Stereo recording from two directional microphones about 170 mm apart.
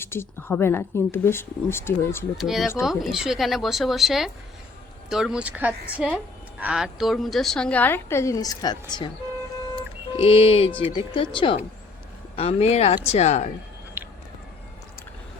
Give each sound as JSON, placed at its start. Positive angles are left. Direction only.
{"t": 0.0, "sound": "speech", "side_deg": 15}
{"t": 2.4, "sound": "speech", "side_deg": 0}
{"t": 9.7, "sound": "a sound", "side_deg": 35}
{"t": 10.9, "sound": "speech", "side_deg": 30}